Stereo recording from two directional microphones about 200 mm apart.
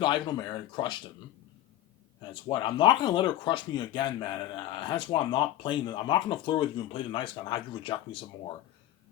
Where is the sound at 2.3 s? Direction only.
25° left (ahead or behind).